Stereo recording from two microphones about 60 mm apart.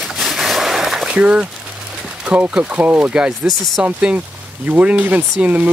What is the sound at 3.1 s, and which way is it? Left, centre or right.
Speech, centre.